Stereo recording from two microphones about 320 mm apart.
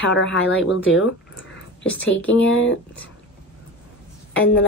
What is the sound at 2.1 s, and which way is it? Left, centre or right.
Speech, left.